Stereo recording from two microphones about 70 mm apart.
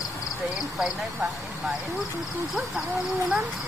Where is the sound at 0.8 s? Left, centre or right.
Centre.